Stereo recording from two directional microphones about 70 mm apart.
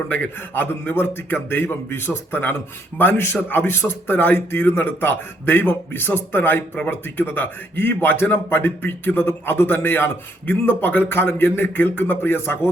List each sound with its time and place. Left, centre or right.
0.3 s a man's voice: left